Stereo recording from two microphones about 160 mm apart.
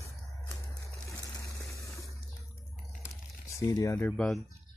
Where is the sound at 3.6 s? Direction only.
20° left (ahead or behind).